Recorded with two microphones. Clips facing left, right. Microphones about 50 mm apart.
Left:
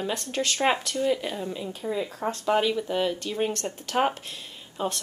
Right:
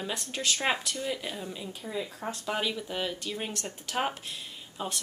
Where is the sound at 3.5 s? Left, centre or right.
Centre.